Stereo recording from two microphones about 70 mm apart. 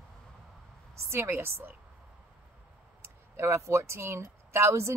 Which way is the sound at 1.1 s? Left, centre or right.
Right.